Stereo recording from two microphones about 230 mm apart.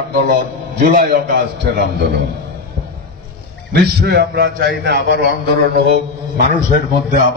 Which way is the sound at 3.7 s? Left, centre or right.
Right.